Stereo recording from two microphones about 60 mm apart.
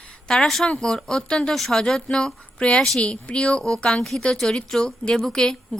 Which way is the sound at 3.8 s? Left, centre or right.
Centre.